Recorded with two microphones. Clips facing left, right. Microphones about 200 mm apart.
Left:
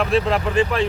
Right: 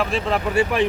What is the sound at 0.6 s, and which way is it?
Speech, 15° right (ahead or behind).